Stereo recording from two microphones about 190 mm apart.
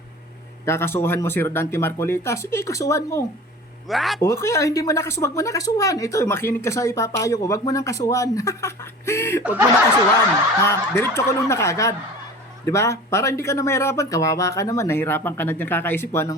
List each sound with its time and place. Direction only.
0.6 s speech: 15° left (ahead or behind)
3.8 s speech: centre (ahead or behind)
4.2 s speech: 15° left (ahead or behind)
9.4 s snicker: 10° right (ahead or behind)
10.6 s speech: 15° left (ahead or behind)